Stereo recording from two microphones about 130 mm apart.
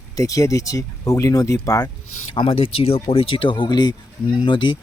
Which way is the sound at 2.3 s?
45° left (ahead or behind).